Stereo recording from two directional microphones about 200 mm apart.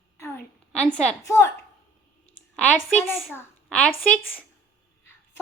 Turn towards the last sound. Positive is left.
turn(degrees=5)  # may be behind; listen again after turning